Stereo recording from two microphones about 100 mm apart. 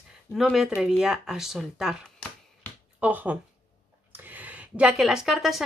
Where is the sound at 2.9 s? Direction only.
15° right (ahead or behind).